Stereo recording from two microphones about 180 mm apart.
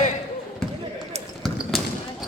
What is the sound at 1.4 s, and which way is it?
Basketball bounce, centre (ahead or behind).